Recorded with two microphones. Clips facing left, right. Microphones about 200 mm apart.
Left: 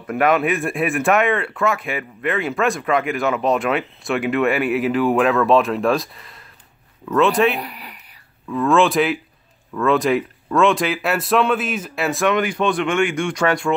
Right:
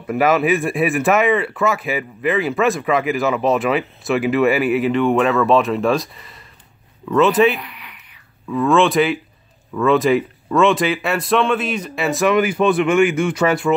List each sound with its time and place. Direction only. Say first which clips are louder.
0.0 s speech: right 1 dB; centre (ahead or behind)
7.6 s a sound: left 4 dB; 40° left (ahead or behind)
8.5 s speech: right 1 dB; centre (ahead or behind)